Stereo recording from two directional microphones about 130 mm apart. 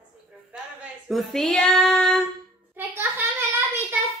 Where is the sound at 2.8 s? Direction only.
15° right (ahead or behind).